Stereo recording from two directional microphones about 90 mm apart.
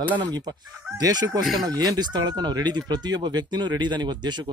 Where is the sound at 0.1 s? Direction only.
50° right (ahead or behind).